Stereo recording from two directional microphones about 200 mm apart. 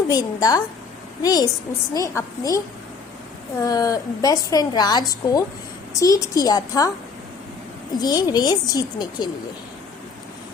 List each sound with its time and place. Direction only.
0.1 s a woman's voice: 20° left (ahead or behind)
3.6 s a woman's voice: 15° left (ahead or behind)
7.9 s speech: 20° left (ahead or behind)